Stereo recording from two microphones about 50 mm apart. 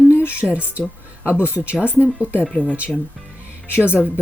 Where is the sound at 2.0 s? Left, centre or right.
Right.